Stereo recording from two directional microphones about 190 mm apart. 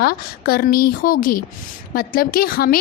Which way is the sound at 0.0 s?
55° left (ahead or behind).